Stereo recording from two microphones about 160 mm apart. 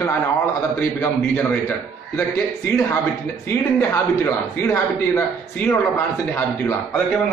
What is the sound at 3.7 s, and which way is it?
A man's voice, 15° left (ahead or behind).